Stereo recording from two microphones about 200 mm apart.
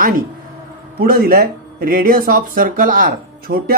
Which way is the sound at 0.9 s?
45° right (ahead or behind).